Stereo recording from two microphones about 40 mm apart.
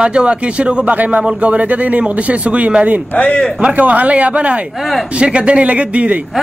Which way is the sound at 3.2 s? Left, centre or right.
Left.